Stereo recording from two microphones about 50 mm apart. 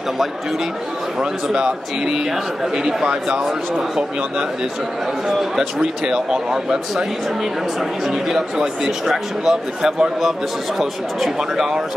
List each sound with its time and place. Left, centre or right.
1.5 s speech: centre
8.1 s speech: centre